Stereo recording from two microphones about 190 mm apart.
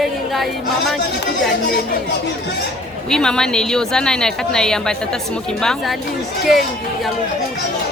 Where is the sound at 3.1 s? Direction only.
5° left (ahead or behind).